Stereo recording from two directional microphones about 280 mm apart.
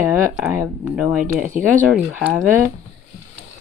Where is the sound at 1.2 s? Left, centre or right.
Right.